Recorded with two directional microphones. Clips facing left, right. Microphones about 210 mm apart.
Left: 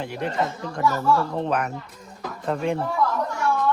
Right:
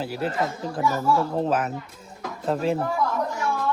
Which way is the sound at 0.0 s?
35° right (ahead or behind).